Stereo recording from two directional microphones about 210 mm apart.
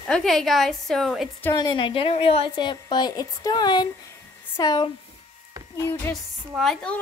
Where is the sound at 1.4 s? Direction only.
20° left (ahead or behind).